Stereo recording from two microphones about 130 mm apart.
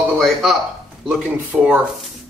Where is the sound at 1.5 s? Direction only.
10° right (ahead or behind).